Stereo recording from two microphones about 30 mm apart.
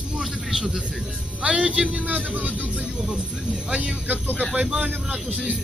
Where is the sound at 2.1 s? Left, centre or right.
Right.